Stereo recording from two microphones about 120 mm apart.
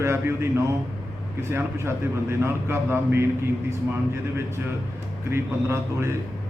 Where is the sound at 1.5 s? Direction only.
20° right (ahead or behind).